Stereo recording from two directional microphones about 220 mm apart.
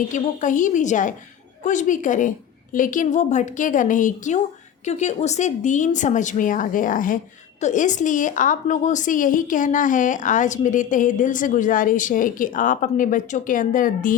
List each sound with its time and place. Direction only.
0.1 s a woman's voice: 35° left (ahead or behind)